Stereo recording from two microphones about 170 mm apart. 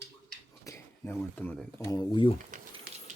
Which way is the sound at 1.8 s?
25° left (ahead or behind).